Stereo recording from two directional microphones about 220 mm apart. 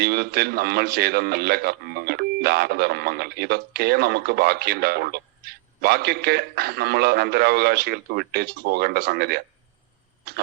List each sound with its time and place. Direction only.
0.0 s a man's voice: 45° right (ahead or behind)